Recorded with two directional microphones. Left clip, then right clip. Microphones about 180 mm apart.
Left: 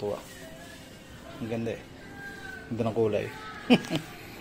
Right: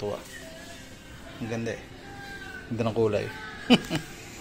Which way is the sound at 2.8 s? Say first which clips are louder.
Right 1 dB; centre (ahead or behind).